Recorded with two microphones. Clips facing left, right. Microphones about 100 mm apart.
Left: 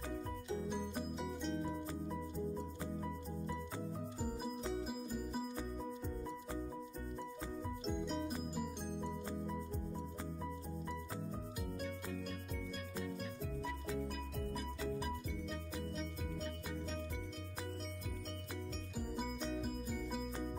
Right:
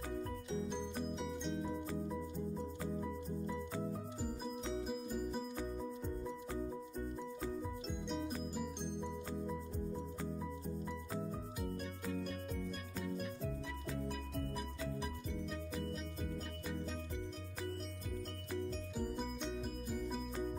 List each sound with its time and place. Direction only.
0.7 s music: 5° left (ahead or behind)
4.8 s music: centre (ahead or behind)
7.8 s music: centre (ahead or behind)